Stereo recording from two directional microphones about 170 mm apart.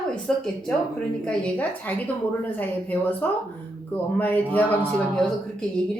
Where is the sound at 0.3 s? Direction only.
5° left (ahead or behind).